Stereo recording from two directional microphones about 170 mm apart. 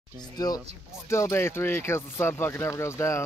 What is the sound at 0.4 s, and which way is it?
Speech, 20° left (ahead or behind).